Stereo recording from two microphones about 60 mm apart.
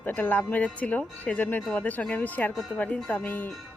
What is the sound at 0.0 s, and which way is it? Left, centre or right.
Speech, left.